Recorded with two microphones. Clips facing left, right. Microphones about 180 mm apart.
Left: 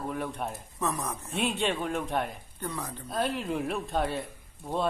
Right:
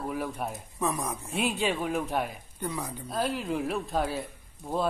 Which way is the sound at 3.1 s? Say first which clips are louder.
Even; centre (ahead or behind).